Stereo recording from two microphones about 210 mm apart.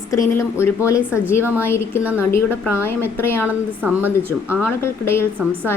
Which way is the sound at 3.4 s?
10° right (ahead or behind).